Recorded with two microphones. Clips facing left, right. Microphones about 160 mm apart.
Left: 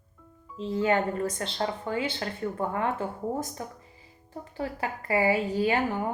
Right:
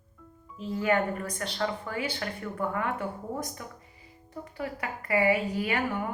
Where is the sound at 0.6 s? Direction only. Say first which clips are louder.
Left 2 dB; 25° left (ahead or behind).